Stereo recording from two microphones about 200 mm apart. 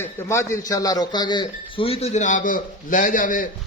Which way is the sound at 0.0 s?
15° left (ahead or behind).